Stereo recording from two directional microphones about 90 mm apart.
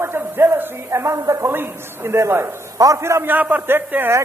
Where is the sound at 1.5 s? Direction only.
25° right (ahead or behind).